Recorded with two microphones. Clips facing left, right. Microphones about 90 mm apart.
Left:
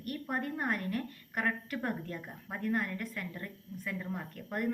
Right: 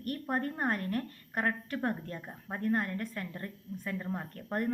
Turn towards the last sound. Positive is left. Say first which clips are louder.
# right 2 dB
turn(degrees=-35)  # may be behind; listen again after turning